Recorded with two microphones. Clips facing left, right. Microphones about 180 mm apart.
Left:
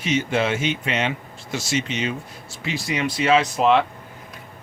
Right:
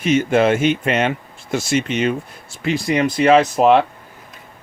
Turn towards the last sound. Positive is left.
turn(degrees=-50)  # may be behind; listen again after turning